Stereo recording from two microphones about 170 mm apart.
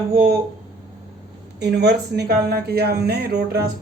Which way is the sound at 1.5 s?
75° right (ahead or behind).